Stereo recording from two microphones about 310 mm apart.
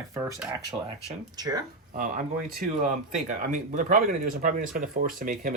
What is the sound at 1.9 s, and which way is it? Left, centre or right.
Speech, right.